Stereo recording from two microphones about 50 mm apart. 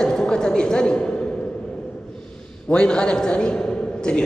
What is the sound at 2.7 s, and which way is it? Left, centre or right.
A man's voice, left.